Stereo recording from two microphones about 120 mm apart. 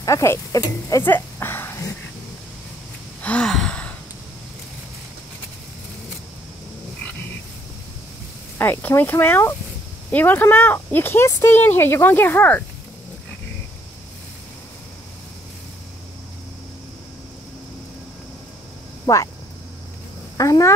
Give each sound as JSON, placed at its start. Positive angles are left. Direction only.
{"t": 0.0, "sound": "speech", "side_deg": 25}
{"t": 1.0, "sound": "speech", "side_deg": 20}
{"t": 3.2, "sound": "gasp", "side_deg": 10}
{"t": 8.5, "sound": "speech", "side_deg": 20}
{"t": 19.1, "sound": "speech", "side_deg": 30}
{"t": 20.3, "sound": "speech", "side_deg": 25}